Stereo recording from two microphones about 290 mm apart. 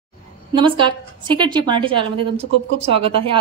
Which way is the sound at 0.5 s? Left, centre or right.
Centre.